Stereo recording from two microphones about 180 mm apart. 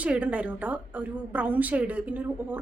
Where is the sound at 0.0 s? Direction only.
5° right (ahead or behind).